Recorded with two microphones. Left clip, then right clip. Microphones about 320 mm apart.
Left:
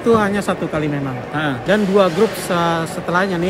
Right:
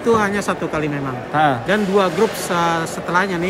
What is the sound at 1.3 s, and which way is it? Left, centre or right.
Speech, centre.